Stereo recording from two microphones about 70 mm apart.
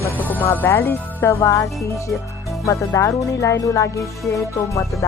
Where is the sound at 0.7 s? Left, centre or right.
Left.